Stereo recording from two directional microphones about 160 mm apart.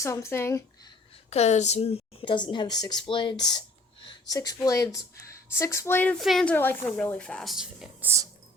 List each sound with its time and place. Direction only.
0.0 s speech: 15° left (ahead or behind)
1.3 s speech: 45° left (ahead or behind); by 6.1 s 15° left (ahead or behind)
6.1 s a woman's voice: centre (ahead or behind)